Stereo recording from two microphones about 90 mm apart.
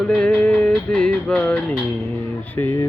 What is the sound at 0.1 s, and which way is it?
Music, 10° left (ahead or behind).